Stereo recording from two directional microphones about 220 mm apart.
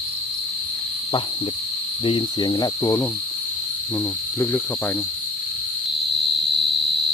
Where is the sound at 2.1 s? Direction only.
20° left (ahead or behind).